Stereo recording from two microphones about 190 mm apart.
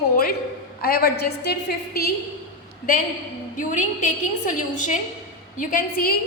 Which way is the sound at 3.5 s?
40° left (ahead or behind).